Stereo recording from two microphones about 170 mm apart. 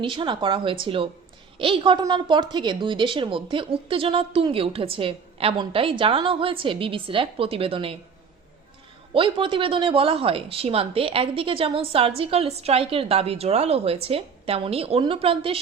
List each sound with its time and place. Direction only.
0.0 s a woman's voice: 30° right (ahead or behind)
9.1 s a woman's voice: 30° right (ahead or behind)